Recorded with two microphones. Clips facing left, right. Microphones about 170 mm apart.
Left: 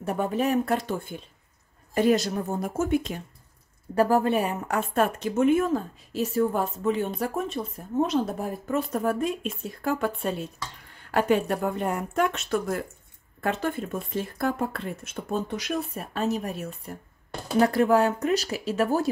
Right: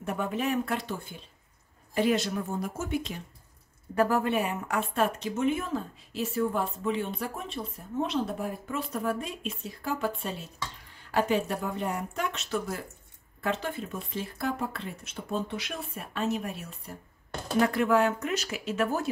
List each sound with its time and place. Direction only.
0.0 s speech: 35° left (ahead or behind)
2.0 s a woman's voice: 40° left (ahead or behind)
3.9 s a woman's voice: 35° left (ahead or behind)